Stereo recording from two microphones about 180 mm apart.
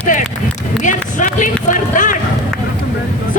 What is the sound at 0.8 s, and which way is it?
Run, 45° left (ahead or behind).